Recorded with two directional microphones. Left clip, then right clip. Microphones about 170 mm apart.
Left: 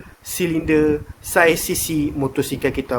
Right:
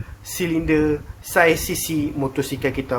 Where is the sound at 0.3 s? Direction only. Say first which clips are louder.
Left 2 dB; 30° left (ahead or behind).